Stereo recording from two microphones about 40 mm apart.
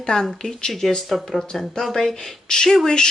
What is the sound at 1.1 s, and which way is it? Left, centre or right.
Speech, centre.